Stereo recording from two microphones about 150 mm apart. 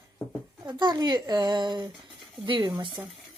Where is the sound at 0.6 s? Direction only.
30° right (ahead or behind).